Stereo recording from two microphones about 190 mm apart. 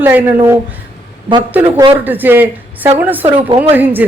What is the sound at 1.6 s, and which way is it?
Speech, 25° right (ahead or behind).